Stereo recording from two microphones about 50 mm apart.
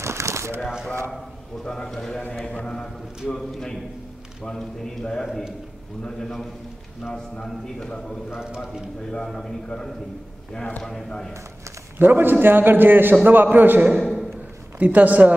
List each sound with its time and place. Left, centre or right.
0.0 s a sound: right
1.6 s a man's voice: centre
2.4 s a man's voice: centre
8.3 s speech: centre
9.1 s a man's voice: centre
10.8 s a man's voice: centre
12.0 s a man's voice: right
13.9 s a sound: centre
14.8 s a man's voice: right